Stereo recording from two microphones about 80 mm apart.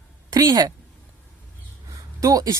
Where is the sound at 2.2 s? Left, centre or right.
Right.